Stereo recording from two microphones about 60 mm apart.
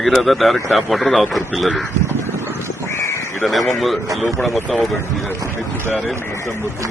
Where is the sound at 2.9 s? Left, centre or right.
Left.